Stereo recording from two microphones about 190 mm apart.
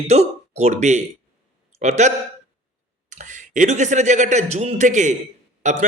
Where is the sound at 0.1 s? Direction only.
35° right (ahead or behind).